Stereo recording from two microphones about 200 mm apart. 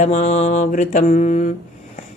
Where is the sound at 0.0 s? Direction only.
35° left (ahead or behind).